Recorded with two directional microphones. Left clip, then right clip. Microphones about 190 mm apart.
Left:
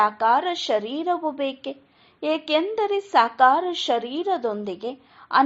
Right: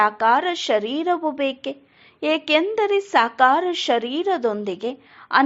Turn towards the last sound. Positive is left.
turn(degrees=-25)  # may be behind; listen again after turning